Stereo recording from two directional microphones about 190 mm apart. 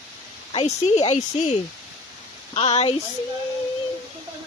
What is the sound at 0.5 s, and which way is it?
Speech, 30° left (ahead or behind).